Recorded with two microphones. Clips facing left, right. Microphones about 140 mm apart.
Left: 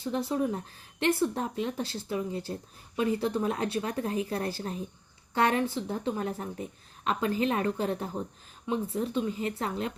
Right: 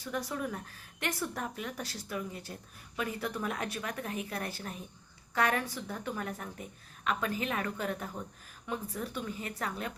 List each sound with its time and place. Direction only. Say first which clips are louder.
0.0 s speech: left 7 dB; 25° left (ahead or behind)